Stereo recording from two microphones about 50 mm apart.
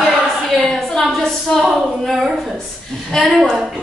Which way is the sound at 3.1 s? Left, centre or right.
Centre.